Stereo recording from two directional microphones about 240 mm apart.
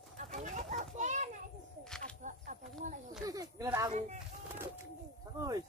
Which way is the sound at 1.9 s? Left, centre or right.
Centre.